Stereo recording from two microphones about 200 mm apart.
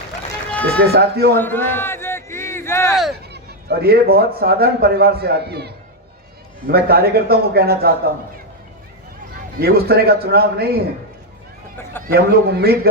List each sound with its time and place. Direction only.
0.5 s run: 10° left (ahead or behind)
0.9 s speech: 50° right (ahead or behind)
1.4 s a sound: 10° left (ahead or behind)
2.9 s a sound: centre (ahead or behind)
3.3 s speech: 50° right (ahead or behind)
9.6 s speech: 50° right (ahead or behind)
12.0 s speech: 50° right (ahead or behind)